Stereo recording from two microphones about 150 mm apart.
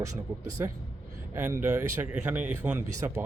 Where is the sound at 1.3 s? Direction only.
15° right (ahead or behind).